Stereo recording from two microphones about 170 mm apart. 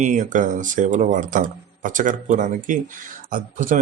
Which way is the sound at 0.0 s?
45° right (ahead or behind).